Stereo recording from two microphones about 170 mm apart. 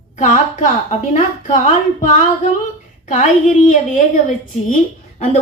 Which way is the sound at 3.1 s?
45° left (ahead or behind).